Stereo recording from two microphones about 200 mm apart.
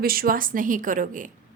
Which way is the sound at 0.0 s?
45° right (ahead or behind).